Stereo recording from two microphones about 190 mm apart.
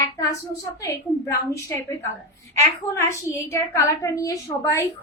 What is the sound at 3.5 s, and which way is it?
A woman's voice, 15° left (ahead or behind).